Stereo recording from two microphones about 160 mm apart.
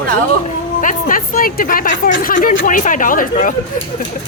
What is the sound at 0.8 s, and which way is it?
A woman's voice, 55° left (ahead or behind).